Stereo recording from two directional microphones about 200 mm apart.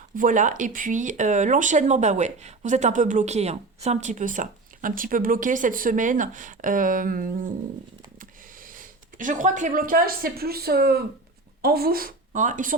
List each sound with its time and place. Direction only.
0.2 s speech: 40° right (ahead or behind)
8.7 s a woman's voice: 40° right (ahead or behind)